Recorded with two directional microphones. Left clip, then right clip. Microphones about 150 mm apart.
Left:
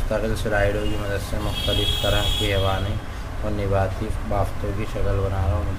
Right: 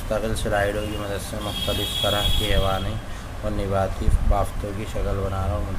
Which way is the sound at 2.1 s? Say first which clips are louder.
Even; 15° right (ahead or behind).